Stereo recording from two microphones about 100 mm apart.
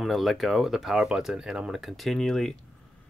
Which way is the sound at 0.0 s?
Centre (ahead or behind).